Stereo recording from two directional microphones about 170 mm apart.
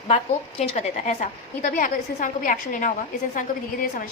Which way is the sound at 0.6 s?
40° left (ahead or behind).